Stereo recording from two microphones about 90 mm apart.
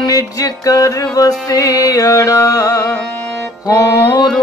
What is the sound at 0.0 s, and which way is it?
Music, 40° left (ahead or behind).